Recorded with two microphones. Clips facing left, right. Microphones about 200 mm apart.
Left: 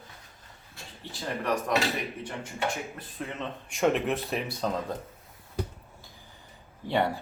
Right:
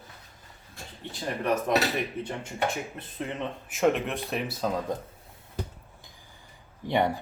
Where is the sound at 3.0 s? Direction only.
20° right (ahead or behind).